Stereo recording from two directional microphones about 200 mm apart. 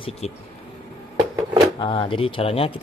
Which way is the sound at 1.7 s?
25° left (ahead or behind).